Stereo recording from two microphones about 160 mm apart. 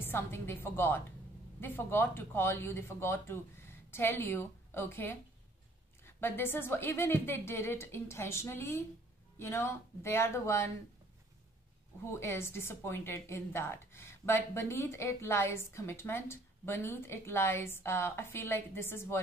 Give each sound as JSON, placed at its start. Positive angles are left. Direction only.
{"t": 0.0, "sound": "speech", "side_deg": 15}
{"t": 12.1, "sound": "speech", "side_deg": 15}